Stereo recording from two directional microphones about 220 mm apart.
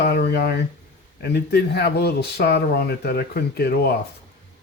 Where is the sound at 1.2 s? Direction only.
50° left (ahead or behind).